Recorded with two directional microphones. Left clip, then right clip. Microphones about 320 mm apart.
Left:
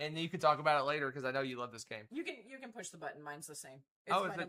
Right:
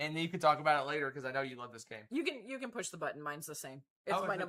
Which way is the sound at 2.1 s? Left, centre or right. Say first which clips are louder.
Right 9 dB; right.